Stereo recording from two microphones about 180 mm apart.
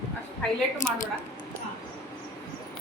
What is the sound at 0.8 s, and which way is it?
Speech, 50° left (ahead or behind).